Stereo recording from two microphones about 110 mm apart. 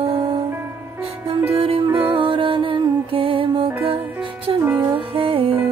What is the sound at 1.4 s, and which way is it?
Music, 60° right (ahead or behind).